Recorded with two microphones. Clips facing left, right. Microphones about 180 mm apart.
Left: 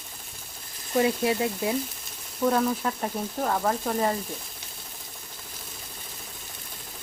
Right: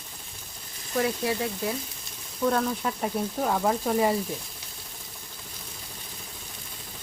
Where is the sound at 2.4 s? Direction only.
5° left (ahead or behind).